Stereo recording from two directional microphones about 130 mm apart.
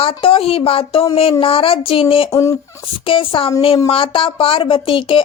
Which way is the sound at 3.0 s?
45° left (ahead or behind).